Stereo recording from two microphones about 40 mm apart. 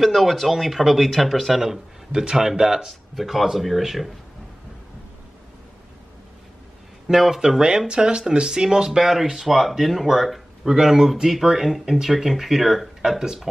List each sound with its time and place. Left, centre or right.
0.0 s speech: centre
2.1 s speech: centre
2.9 s speech: centre
7.1 s speech: centre
9.0 s speech: centre